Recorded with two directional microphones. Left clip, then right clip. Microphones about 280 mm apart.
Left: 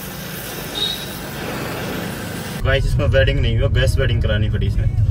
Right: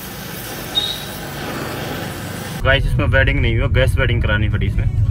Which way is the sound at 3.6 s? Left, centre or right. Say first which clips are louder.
Right 1 dB; centre.